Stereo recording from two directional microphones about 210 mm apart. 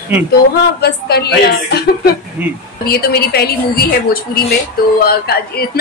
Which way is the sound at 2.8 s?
45° left (ahead or behind).